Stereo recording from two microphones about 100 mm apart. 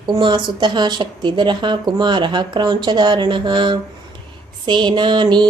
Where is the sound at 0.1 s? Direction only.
50° right (ahead or behind).